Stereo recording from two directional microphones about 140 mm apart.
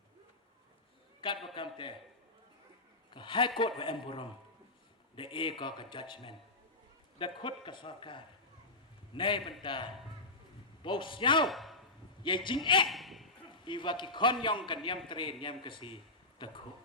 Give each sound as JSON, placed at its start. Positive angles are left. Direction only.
{"t": 1.2, "sound": "speech", "side_deg": 35}
{"t": 3.1, "sound": "speech", "side_deg": 35}
{"t": 11.4, "sound": "a sound", "side_deg": 0}
{"t": 12.2, "sound": "speech", "side_deg": 35}
{"t": 12.9, "sound": "a sound", "side_deg": 0}
{"t": 13.7, "sound": "speech", "side_deg": 35}